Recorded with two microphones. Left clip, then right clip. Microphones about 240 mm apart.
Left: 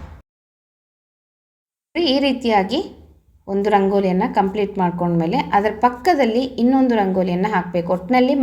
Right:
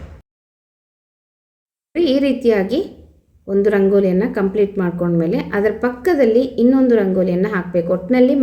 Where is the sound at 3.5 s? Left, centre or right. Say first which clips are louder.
Right 5 dB; centre.